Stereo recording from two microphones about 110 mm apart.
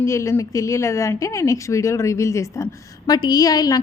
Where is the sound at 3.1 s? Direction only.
40° left (ahead or behind).